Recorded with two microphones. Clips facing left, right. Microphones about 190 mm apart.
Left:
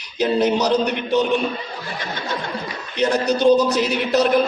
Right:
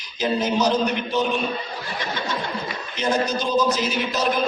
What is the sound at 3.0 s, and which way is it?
A man's voice, 65° left (ahead or behind).